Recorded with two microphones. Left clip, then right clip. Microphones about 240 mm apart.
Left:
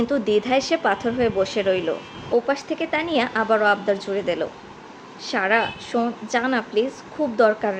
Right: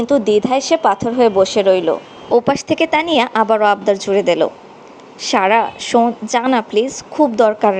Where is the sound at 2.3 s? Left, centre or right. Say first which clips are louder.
Right 8 dB; right.